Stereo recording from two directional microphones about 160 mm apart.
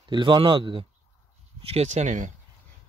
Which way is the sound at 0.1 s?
30° right (ahead or behind).